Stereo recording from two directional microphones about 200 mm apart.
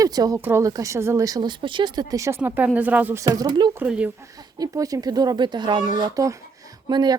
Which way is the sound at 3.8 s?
5° right (ahead or behind).